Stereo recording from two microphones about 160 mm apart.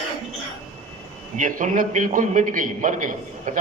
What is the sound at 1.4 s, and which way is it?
A man's voice, 55° right (ahead or behind).